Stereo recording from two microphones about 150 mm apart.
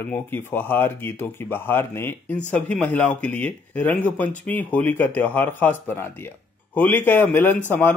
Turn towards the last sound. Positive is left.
turn(degrees=15)  # may be behind; listen again after turning